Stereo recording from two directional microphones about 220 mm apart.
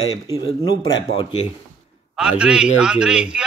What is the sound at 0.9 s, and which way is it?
Speech, 20° left (ahead or behind).